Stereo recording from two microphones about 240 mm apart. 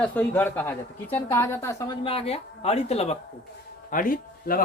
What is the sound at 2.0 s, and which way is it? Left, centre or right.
A woman's voice, left.